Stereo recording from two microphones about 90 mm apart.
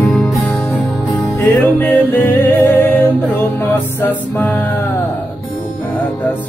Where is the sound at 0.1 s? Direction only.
5° left (ahead or behind).